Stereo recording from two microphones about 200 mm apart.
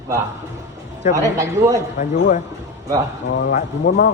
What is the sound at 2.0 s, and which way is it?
Speech, 40° left (ahead or behind).